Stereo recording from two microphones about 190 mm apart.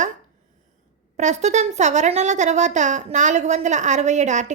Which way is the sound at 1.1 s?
35° right (ahead or behind).